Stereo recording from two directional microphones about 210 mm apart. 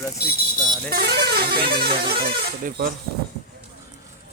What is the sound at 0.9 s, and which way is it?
Speech, 50° right (ahead or behind).